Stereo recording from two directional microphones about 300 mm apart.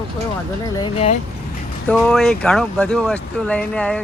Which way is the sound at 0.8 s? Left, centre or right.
Centre.